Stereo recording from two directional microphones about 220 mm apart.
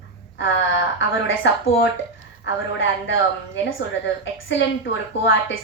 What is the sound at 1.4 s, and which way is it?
A woman's voice, 55° left (ahead or behind).